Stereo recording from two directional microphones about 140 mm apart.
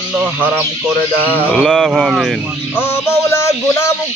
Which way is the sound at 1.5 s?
Centre (ahead or behind).